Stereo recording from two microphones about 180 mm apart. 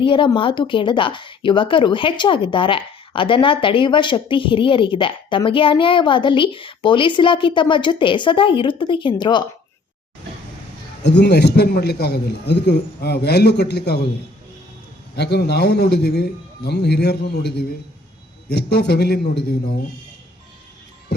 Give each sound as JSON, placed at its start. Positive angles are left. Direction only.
{"t": 0.0, "sound": "speech", "side_deg": 30}
{"t": 11.0, "sound": "a man's voice", "side_deg": 70}
{"t": 15.1, "sound": "a man's voice", "side_deg": 65}